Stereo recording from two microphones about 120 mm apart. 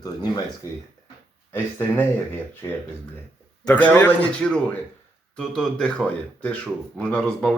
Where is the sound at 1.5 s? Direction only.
20° left (ahead or behind).